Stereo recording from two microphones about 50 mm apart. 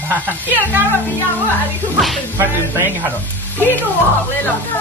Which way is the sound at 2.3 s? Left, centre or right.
Right.